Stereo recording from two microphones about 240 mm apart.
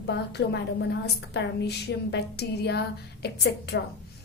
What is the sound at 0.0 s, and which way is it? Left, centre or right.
A woman's voice, left.